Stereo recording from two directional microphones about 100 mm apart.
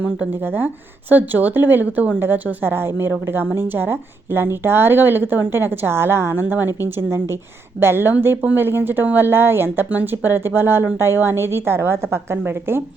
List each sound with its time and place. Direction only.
0.2 s speech: 20° right (ahead or behind)